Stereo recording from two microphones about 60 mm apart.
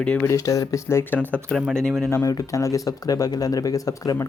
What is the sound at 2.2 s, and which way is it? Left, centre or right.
Speech, left.